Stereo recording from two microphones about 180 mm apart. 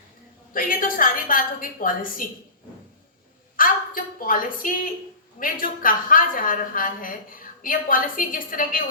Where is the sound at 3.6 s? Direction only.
50° left (ahead or behind).